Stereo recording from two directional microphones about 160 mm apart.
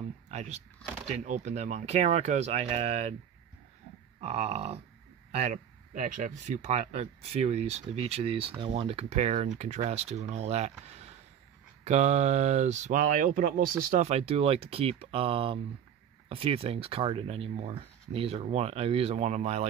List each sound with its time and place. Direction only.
0.3 s speech: 45° right (ahead or behind)
4.2 s speech: 40° right (ahead or behind)